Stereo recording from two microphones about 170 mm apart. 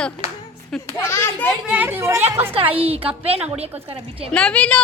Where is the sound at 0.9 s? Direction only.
15° left (ahead or behind).